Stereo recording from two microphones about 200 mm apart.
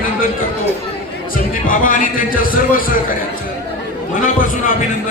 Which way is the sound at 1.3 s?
45° left (ahead or behind).